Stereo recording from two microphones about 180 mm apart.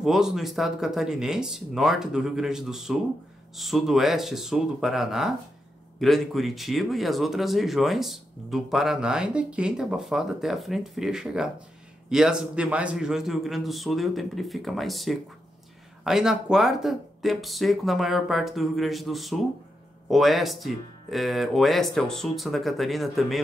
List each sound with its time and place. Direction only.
0.0 s speech: centre (ahead or behind)